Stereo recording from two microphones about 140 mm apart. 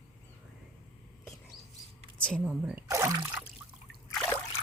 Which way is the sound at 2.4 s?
10° right (ahead or behind).